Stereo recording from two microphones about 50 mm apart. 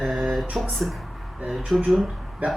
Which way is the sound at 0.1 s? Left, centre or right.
Centre.